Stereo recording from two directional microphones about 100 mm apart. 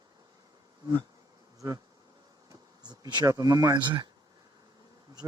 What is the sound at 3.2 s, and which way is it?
Speech, 35° right (ahead or behind).